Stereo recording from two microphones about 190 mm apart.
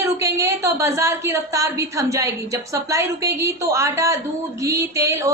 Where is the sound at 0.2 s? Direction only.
15° right (ahead or behind).